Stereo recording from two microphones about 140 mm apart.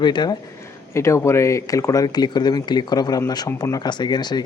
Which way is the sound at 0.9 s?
20° left (ahead or behind).